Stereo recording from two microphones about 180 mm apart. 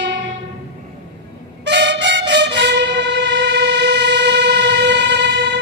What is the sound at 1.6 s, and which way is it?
Music, 75° right (ahead or behind).